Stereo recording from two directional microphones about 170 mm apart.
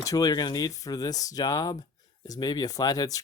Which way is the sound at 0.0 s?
20° left (ahead or behind).